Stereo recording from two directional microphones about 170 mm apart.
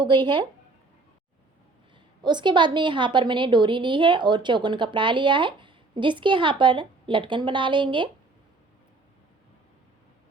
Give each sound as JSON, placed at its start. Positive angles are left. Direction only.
{"t": 0.1, "sound": "a woman's voice", "side_deg": -25}
{"t": 2.2, "sound": "a woman's voice", "side_deg": -25}